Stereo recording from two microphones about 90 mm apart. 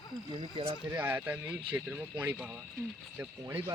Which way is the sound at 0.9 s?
20° right (ahead or behind).